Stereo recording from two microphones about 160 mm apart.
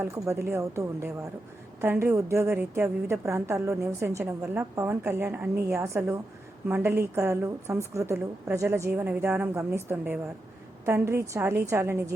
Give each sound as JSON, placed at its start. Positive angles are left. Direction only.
{"t": 0.0, "sound": "a woman's voice", "side_deg": -15}